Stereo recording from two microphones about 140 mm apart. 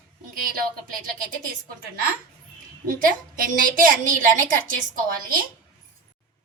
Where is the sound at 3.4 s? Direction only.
85° right.